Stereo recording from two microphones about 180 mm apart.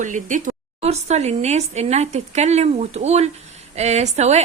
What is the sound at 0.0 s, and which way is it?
A woman's voice, 45° right (ahead or behind).